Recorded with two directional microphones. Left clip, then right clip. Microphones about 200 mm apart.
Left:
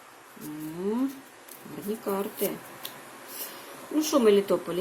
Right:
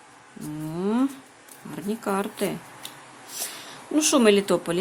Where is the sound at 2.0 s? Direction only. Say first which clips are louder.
Right 4 dB; 25° right (ahead or behind).